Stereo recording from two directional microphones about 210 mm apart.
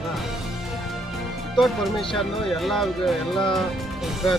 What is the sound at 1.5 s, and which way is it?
Speech, centre (ahead or behind).